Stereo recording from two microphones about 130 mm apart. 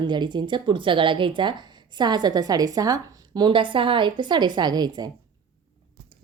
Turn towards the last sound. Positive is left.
turn(degrees=-30)  # may be behind; listen again after turning